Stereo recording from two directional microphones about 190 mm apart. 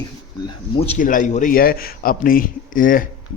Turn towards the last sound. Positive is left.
turn(degrees=45)  # may be behind; listen again after turning